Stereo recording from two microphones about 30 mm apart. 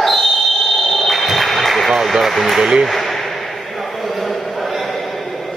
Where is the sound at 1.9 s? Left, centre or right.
Centre.